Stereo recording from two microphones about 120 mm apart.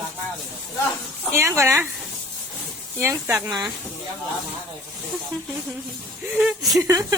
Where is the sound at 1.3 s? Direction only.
25° right (ahead or behind).